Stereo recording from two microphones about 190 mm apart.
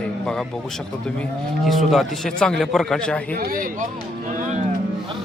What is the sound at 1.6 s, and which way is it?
A man's voice, centre (ahead or behind).